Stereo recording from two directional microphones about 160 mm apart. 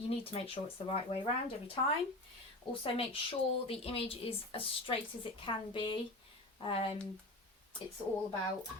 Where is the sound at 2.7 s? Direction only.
35° left (ahead or behind).